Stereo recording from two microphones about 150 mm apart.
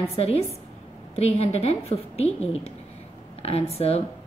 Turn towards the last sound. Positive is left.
turn(degrees=45)  # may be behind; listen again after turning